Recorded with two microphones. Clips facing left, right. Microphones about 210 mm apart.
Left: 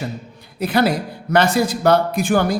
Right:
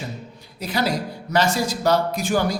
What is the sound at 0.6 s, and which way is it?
A man's voice, 55° left (ahead or behind).